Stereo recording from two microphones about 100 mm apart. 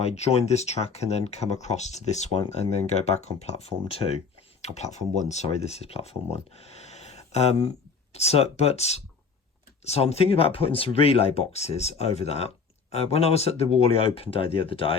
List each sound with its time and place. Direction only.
0.0 s speech: 90° left; by 14.9 s 65° left (ahead or behind)